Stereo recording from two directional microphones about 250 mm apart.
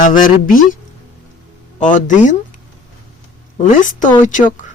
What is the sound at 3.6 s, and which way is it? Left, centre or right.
A woman's voice, left.